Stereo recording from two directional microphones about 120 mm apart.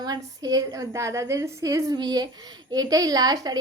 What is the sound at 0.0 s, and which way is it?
A woman's voice, 35° right (ahead or behind).